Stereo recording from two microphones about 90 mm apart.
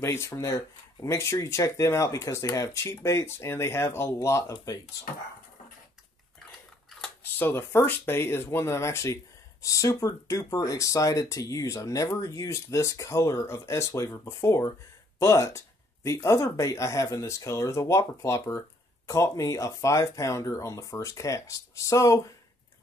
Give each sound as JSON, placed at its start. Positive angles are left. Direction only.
{"t": 0.0, "sound": "speech", "side_deg": 30}
{"t": 7.3, "sound": "speech", "side_deg": 25}